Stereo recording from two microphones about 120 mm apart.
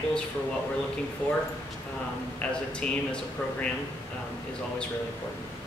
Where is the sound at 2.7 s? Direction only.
10° left (ahead or behind).